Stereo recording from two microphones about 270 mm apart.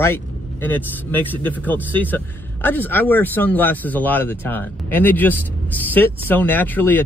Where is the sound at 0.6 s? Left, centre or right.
Centre.